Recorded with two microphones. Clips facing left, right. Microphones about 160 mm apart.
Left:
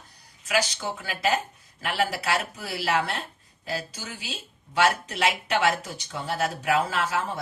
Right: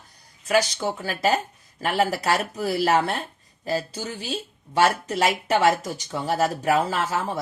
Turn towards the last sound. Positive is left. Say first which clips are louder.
# right 2 dB
turn(degrees=-40)  # may be behind; listen again after turning